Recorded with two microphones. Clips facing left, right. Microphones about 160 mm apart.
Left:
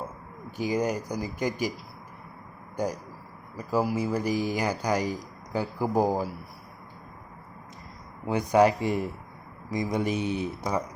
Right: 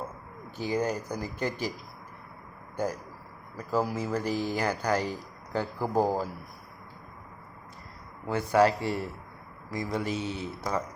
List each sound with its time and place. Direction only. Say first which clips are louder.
0.5 s speech: left 2 dB; 15° left (ahead or behind)
2.7 s speech: left 1 dB; 15° left (ahead or behind)
8.3 s speech: left 2 dB; 15° left (ahead or behind)